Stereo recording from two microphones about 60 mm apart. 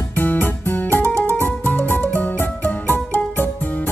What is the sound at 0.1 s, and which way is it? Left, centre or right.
Music, left.